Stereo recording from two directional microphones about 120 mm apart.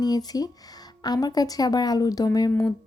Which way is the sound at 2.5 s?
20° left (ahead or behind).